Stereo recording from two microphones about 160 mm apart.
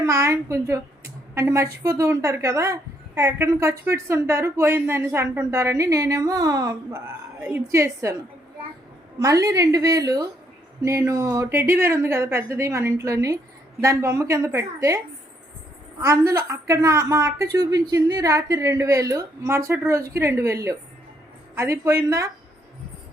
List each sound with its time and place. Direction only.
0.0 s a woman's voice: 20° right (ahead or behind)
7.3 s a woman's voice: 10° right (ahead or behind)
9.1 s a woman's voice: 20° right (ahead or behind)
16.0 s a woman's voice: 20° right (ahead or behind)